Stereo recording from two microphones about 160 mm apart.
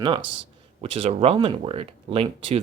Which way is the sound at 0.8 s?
35° right (ahead or behind).